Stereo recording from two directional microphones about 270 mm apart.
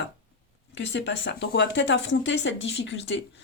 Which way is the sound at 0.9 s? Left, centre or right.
Left.